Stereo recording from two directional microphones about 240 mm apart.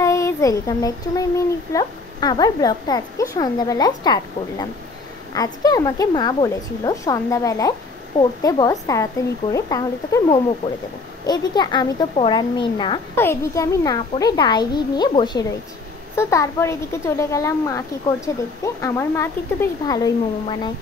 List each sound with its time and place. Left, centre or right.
0.0 s a child's voice: centre
10.6 s a woman's voice: left